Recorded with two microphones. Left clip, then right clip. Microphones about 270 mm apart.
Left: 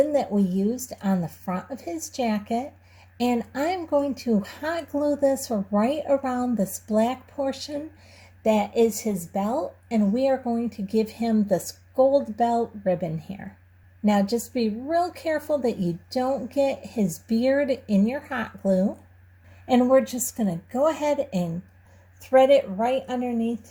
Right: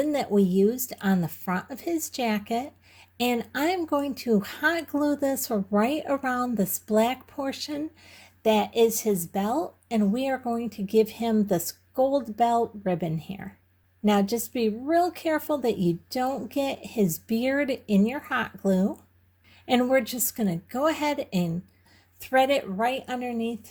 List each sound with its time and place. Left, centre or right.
0.1 s speech: right